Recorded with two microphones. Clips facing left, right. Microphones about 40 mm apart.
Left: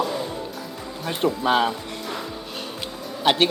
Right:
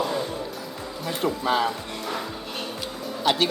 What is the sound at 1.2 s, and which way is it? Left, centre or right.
Speech, left.